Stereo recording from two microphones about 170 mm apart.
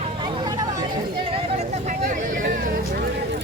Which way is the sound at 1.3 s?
40° right (ahead or behind).